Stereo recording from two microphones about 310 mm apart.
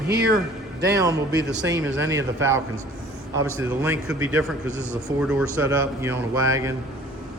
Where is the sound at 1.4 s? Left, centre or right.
Right.